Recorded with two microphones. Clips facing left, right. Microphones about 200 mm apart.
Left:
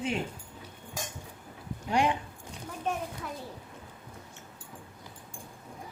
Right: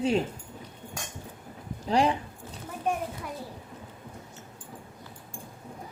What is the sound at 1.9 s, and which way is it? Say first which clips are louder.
Speech: right 3 dB; 35° right (ahead or behind).